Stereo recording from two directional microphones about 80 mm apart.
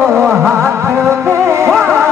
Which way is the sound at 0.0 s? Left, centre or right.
Right.